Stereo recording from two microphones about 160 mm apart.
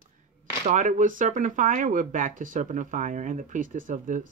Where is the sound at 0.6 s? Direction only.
50° right (ahead or behind).